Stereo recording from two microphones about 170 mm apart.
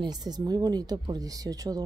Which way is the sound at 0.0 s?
25° right (ahead or behind).